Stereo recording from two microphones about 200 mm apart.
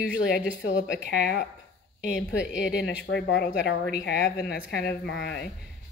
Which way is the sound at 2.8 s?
60° left (ahead or behind).